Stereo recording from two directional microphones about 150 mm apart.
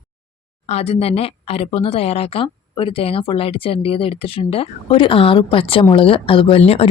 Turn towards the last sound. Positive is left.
turn(degrees=40)  # may be behind; listen again after turning